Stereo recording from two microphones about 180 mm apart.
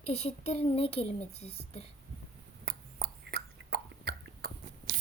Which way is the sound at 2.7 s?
60° right (ahead or behind).